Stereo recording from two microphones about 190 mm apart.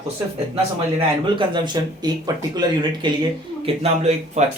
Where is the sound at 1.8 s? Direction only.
20° right (ahead or behind).